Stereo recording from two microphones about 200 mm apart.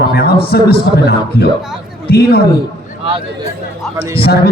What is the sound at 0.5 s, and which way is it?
A man's voice, 50° left (ahead or behind).